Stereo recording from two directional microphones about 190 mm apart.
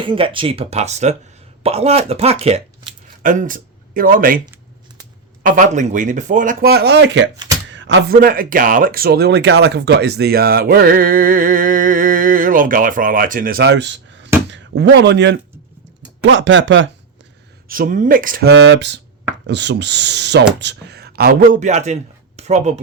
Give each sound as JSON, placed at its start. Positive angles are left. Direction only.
{"t": 0.0, "sound": "speech", "side_deg": -25}
{"t": 5.4, "sound": "speech", "side_deg": -45}
{"t": 7.3, "sound": "chopping", "side_deg": -20}
{"t": 7.7, "sound": "a sound", "side_deg": -75}
{"t": 8.1, "sound": "speech", "side_deg": -50}
{"t": 17.7, "sound": "speech", "side_deg": -45}